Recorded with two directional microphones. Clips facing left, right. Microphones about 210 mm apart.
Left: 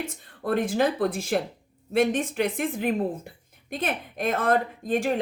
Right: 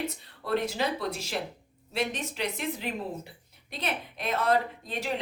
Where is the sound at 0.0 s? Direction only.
50° left (ahead or behind).